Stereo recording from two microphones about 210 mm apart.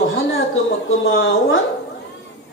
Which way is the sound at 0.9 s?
70° left (ahead or behind).